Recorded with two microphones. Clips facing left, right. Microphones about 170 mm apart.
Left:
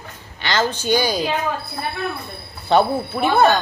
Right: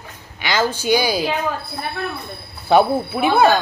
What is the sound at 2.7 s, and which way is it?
Speech, 10° right (ahead or behind).